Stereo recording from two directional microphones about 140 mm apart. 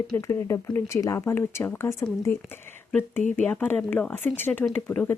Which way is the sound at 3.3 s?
10° left (ahead or behind).